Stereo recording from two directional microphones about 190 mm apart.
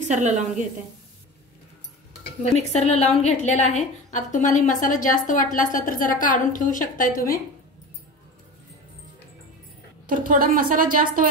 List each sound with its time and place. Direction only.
0.1 s a woman's voice: 40° right (ahead or behind)
2.5 s a woman's voice: 35° left (ahead or behind)
10.0 s a woman's voice: 45° right (ahead or behind)